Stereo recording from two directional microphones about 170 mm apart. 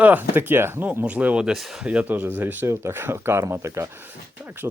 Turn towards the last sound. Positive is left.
turn(degrees=-10)  # may be behind; listen again after turning